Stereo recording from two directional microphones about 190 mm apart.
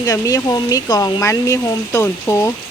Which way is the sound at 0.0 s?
15° left (ahead or behind).